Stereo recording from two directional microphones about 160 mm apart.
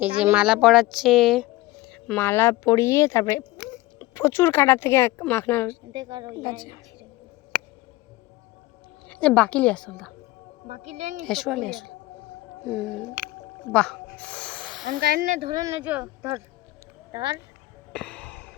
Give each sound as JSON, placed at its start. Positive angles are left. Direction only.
{"t": 0.2, "sound": "speech", "side_deg": -5}
{"t": 1.9, "sound": "a sound", "side_deg": 5}
{"t": 2.2, "sound": "speech", "side_deg": 15}
{"t": 5.9, "sound": "a woman's voice", "side_deg": -25}
{"t": 6.4, "sound": "a woman's voice", "side_deg": 30}
{"t": 9.0, "sound": "speech", "side_deg": 5}
{"t": 10.7, "sound": "speech", "side_deg": -45}
{"t": 11.2, "sound": "speech", "side_deg": 0}
{"t": 13.7, "sound": "a sound", "side_deg": 5}
{"t": 14.8, "sound": "speech", "side_deg": -65}
{"t": 15.4, "sound": "speech", "side_deg": -30}
{"t": 15.6, "sound": "speech", "side_deg": -15}
{"t": 17.9, "sound": "music", "side_deg": 10}